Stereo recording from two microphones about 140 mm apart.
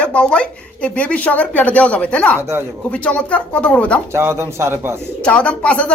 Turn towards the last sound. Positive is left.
turn(degrees=10)  # may be behind; listen again after turning